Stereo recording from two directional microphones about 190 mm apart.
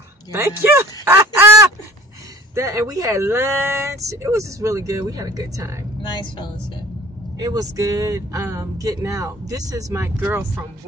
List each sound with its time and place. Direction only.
0.3 s speech: 15° right (ahead or behind)
6.0 s speech: 25° left (ahead or behind)
7.3 s speech: 20° right (ahead or behind)